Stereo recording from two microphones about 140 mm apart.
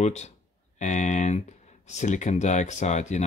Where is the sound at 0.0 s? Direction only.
50° left (ahead or behind).